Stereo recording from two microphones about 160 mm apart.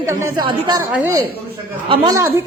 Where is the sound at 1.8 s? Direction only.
25° right (ahead or behind).